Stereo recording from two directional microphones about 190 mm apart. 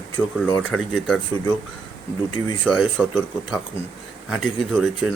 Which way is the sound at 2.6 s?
5° left (ahead or behind).